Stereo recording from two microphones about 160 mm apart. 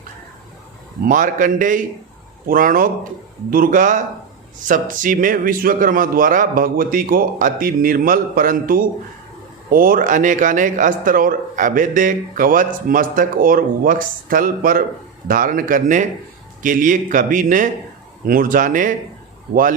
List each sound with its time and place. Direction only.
1.0 s a man's voice: 60° right (ahead or behind)